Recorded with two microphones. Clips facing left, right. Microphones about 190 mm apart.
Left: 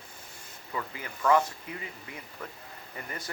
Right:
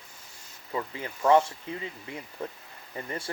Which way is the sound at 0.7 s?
30° right (ahead or behind).